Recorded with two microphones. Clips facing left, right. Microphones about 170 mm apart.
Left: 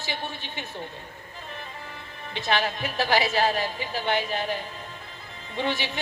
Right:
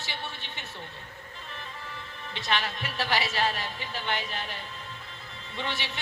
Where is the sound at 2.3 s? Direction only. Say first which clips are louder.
Left 5 dB; 50° left (ahead or behind).